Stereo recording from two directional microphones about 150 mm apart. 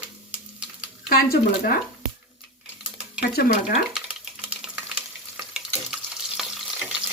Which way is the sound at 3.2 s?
90° left.